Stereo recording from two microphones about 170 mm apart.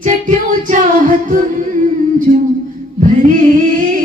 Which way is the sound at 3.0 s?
50° right (ahead or behind).